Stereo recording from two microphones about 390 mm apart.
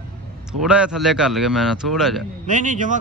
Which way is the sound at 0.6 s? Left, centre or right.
Centre.